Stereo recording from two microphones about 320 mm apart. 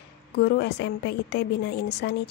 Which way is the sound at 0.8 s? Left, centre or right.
Left.